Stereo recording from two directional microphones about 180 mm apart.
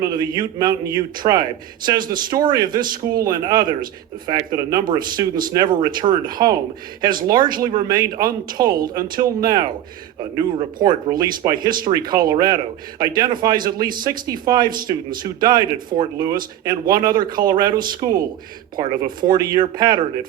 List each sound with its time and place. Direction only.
0.0 s a man's voice: 25° right (ahead or behind)